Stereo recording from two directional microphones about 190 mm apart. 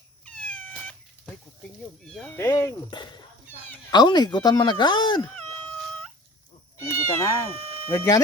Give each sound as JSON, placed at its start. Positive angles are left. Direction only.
{"t": 0.3, "sound": "cat", "side_deg": 5}
{"t": 2.0, "sound": "speech", "side_deg": 5}
{"t": 6.7, "sound": "cat", "side_deg": 15}
{"t": 7.9, "sound": "speech", "side_deg": 20}